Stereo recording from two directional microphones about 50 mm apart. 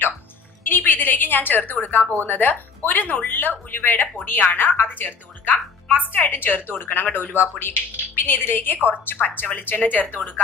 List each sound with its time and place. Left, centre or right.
0.7 s a woman's voice: left